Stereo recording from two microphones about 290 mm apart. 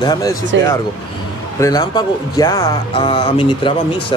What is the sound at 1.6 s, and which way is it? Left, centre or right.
Speech, centre.